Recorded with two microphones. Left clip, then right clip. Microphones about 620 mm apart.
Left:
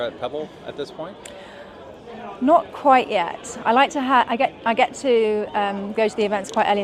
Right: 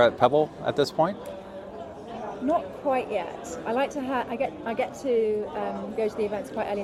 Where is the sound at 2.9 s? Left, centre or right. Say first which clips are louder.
Left 10 dB; left.